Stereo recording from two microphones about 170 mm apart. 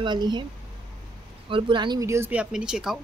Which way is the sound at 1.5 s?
25° right (ahead or behind).